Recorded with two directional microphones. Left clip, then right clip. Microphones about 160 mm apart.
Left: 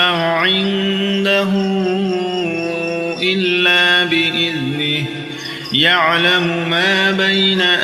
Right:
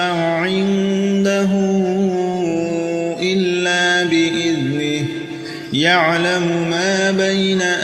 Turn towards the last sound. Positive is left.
turn(degrees=-40)  # may be behind; listen again after turning